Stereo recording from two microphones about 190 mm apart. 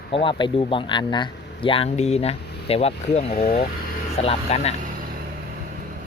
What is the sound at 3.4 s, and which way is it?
Speech, 50° left (ahead or behind).